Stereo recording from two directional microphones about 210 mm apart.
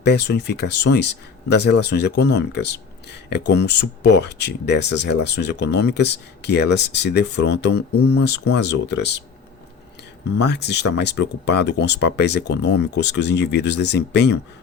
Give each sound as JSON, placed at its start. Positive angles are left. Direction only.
{"t": 0.0, "sound": "speech", "side_deg": 55}
{"t": 10.3, "sound": "speech", "side_deg": 55}